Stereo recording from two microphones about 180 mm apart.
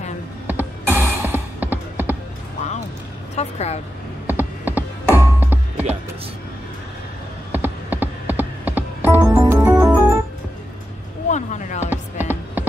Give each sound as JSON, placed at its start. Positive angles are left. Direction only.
{"t": 0.5, "sound": "mechanisms", "side_deg": -10}
{"t": 3.3, "sound": "a woman's voice", "side_deg": 35}
{"t": 4.3, "sound": "music", "side_deg": -10}
{"t": 7.5, "sound": "music", "side_deg": -10}
{"t": 11.2, "sound": "a sound", "side_deg": 40}
{"t": 11.9, "sound": "music", "side_deg": -10}